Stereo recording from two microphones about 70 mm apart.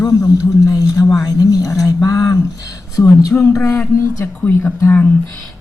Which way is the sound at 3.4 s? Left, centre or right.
Left.